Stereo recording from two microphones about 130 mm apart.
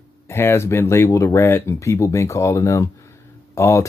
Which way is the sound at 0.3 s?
20° left (ahead or behind).